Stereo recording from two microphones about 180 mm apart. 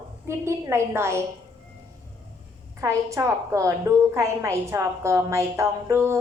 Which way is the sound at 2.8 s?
15° right (ahead or behind).